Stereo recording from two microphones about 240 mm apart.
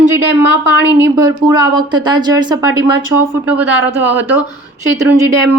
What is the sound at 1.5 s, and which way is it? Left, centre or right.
A woman's voice, centre.